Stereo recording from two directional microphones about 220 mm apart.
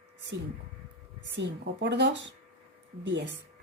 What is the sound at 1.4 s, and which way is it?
A woman's voice, 50° right (ahead or behind).